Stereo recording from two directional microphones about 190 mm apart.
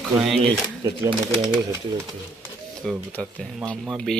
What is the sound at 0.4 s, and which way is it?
Speech, 20° right (ahead or behind).